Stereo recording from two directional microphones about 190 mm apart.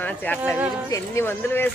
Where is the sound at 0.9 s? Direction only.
15° left (ahead or behind).